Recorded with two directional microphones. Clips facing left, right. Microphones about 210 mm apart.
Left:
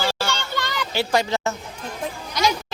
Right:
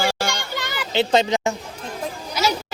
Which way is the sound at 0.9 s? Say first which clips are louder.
Right 4 dB; 20° right (ahead or behind).